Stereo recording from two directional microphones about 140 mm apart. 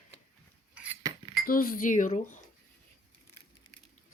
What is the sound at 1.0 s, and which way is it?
Cutlery, 25° right (ahead or behind).